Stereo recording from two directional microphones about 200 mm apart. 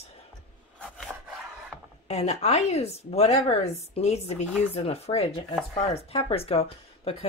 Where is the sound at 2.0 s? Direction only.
35° left (ahead or behind).